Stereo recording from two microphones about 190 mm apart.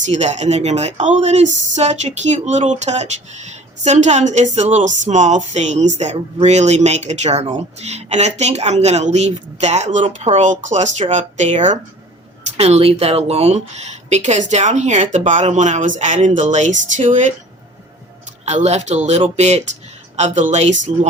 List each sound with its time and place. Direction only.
0.1 s speech: 40° right (ahead or behind)
18.4 s speech: 35° right (ahead or behind)